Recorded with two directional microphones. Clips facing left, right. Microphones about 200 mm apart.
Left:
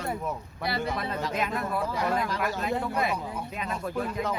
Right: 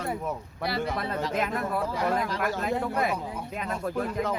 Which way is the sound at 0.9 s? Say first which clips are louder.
Right 1 dB; 55° right (ahead or behind).